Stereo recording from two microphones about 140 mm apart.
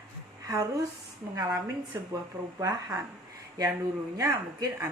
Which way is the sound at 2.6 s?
20° right (ahead or behind).